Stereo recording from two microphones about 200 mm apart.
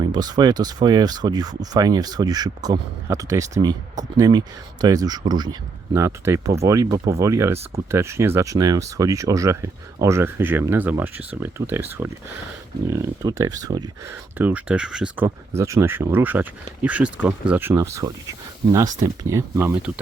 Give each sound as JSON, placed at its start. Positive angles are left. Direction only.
{"t": 0.0, "sound": "speech", "side_deg": -20}
{"t": 14.3, "sound": "speech", "side_deg": -10}